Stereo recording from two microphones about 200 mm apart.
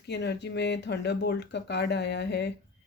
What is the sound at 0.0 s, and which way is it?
Speech, 55° left (ahead or behind).